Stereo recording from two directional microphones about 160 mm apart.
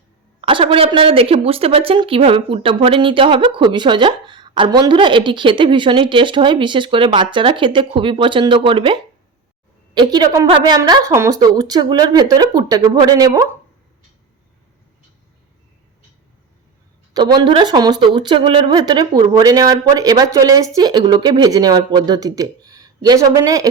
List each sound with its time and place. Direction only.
0.4 s a woman's voice: 35° right (ahead or behind)
17.2 s speech: 25° right (ahead or behind)